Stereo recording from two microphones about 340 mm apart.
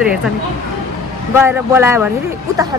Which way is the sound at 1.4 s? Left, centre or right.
Centre.